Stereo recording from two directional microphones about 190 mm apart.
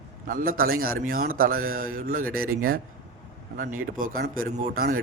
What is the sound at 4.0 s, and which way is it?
A man's voice, 45° right (ahead or behind).